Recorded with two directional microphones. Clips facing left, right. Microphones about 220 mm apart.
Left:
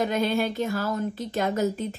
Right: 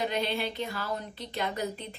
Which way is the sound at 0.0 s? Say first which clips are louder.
Left 6 dB; 45° left (ahead or behind).